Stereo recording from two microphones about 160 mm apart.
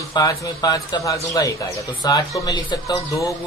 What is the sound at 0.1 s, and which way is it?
A man's voice, 20° left (ahead or behind).